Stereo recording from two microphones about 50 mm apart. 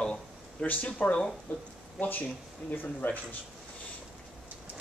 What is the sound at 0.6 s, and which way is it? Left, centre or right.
A man's voice, left.